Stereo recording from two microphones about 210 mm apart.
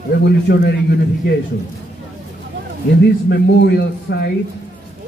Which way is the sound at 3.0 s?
50° left (ahead or behind).